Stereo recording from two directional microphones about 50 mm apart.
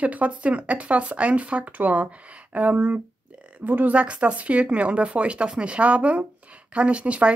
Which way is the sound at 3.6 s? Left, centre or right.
Right.